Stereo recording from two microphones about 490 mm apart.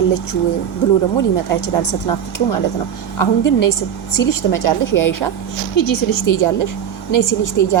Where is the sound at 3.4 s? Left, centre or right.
Left.